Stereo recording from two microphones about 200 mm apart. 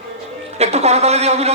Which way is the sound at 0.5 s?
30° right (ahead or behind).